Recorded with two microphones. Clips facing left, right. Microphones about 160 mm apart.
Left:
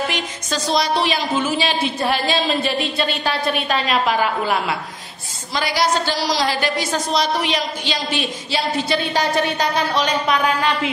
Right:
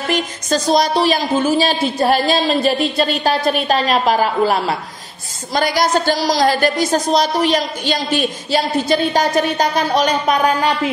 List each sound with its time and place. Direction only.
0.1 s a woman's voice: 45° right (ahead or behind)